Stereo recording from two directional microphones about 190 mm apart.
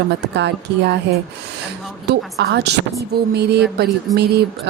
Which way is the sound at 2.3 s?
60° right (ahead or behind).